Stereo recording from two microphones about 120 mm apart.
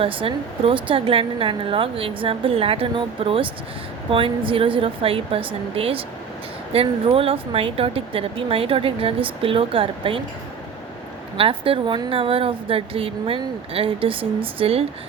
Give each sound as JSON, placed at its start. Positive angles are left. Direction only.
{"t": 0.0, "sound": "a woman's voice", "side_deg": -50}
{"t": 11.3, "sound": "a woman's voice", "side_deg": -50}